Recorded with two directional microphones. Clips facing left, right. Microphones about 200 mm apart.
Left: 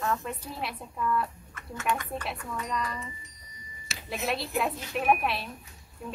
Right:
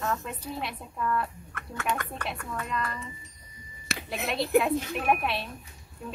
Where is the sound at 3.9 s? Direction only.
60° right (ahead or behind).